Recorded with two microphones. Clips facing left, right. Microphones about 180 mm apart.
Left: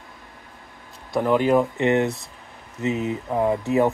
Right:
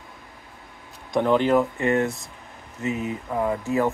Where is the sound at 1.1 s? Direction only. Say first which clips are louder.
Left 1 dB; 5° left (ahead or behind).